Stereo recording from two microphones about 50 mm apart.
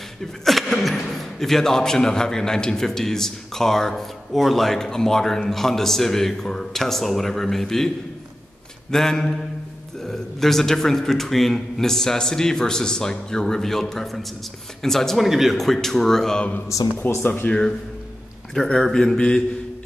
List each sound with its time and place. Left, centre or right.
0.2 s a man's voice: centre
8.9 s a man's voice: centre
17.0 s speech: left
17.5 s a man's voice: centre